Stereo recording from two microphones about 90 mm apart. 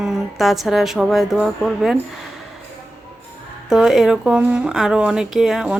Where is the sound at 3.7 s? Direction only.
5° right (ahead or behind).